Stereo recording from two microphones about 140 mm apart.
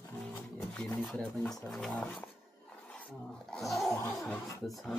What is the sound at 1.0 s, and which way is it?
Speech, centre (ahead or behind).